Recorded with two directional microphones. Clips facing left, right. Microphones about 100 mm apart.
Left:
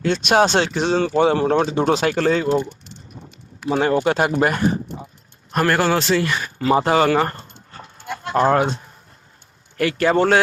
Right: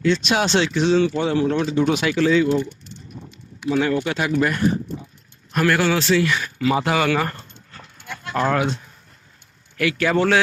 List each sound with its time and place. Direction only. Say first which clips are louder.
0.0 s speech: left 3 dB; 55° left (ahead or behind)
1.9 s speech: even; 40° left (ahead or behind)
3.6 s speech: left 2 dB; 40° left (ahead or behind)